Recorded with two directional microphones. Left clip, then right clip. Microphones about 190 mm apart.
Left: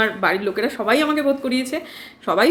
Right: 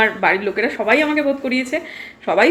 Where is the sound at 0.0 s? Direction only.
10° left (ahead or behind).